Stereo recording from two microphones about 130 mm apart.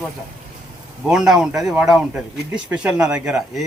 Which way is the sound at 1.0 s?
5° right (ahead or behind).